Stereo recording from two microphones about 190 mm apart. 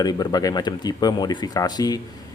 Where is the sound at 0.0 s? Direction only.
20° left (ahead or behind).